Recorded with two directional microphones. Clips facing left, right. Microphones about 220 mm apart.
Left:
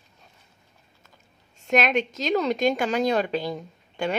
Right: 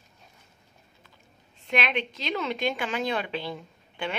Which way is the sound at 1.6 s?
45° left (ahead or behind).